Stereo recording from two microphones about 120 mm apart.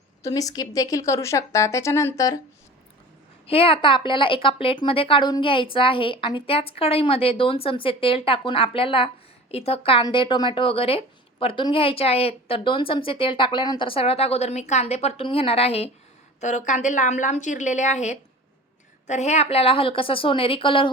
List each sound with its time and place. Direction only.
0.2 s speech: 30° left (ahead or behind)
3.4 s a woman's voice: 50° left (ahead or behind)
10.0 s a woman's voice: 40° left (ahead or behind); by 15.9 s 60° left (ahead or behind)
16.4 s a woman's voice: 85° left; by 20.9 s 45° left (ahead or behind)